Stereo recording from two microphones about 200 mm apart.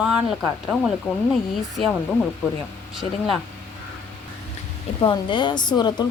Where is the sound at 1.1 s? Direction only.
10° left (ahead or behind).